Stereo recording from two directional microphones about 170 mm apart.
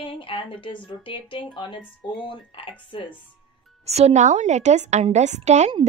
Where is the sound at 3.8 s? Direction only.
40° right (ahead or behind).